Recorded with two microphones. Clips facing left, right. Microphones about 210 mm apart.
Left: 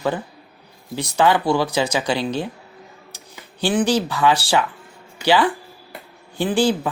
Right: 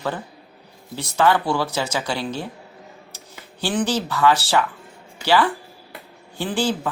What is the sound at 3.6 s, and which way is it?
Speech, 15° left (ahead or behind).